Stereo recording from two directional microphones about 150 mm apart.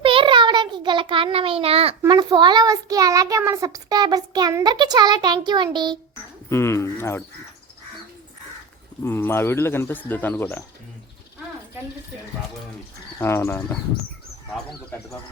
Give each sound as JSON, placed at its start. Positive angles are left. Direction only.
{"t": 0.0, "sound": "child singing", "side_deg": -35}
{"t": 2.0, "sound": "child singing", "side_deg": -30}
{"t": 5.7, "sound": "a child's voice", "side_deg": -30}
{"t": 6.5, "sound": "speech", "side_deg": 15}
{"t": 9.0, "sound": "speech", "side_deg": 15}
{"t": 13.1, "sound": "speech", "side_deg": 15}